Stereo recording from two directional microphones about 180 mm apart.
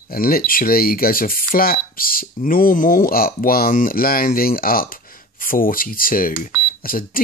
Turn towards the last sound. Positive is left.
turn(degrees=55)  # may be behind; listen again after turning